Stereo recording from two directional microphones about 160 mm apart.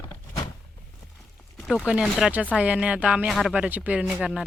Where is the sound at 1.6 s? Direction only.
Centre (ahead or behind).